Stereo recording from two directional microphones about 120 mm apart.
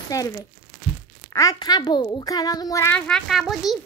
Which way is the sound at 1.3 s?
30° left (ahead or behind).